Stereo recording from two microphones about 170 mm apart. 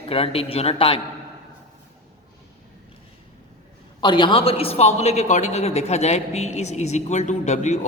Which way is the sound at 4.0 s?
30° left (ahead or behind).